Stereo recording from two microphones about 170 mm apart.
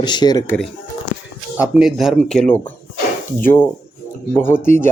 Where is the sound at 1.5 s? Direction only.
5° right (ahead or behind).